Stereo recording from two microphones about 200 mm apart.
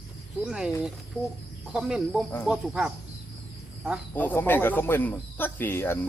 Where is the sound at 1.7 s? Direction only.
Centre (ahead or behind).